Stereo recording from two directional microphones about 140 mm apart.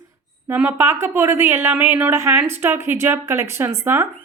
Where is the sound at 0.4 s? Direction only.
15° right (ahead or behind).